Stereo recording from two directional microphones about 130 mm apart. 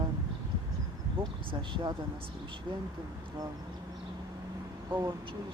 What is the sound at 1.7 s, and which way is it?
Speech, 35° right (ahead or behind).